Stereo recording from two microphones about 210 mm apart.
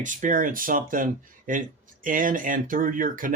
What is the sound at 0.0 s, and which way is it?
Speech, 35° right (ahead or behind).